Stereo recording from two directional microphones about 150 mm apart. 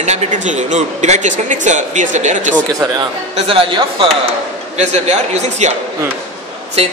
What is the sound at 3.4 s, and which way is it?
Speech, 35° right (ahead or behind).